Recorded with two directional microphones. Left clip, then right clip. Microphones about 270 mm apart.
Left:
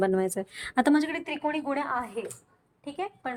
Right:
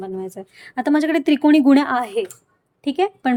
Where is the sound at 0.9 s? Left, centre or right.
Centre.